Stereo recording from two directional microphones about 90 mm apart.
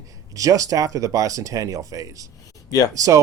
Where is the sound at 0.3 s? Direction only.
40° right (ahead or behind).